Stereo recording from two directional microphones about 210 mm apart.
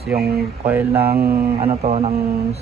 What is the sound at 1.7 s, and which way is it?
Speech, 30° right (ahead or behind).